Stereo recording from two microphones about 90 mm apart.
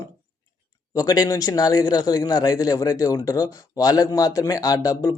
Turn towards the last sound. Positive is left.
turn(degrees=40)  # may be behind; listen again after turning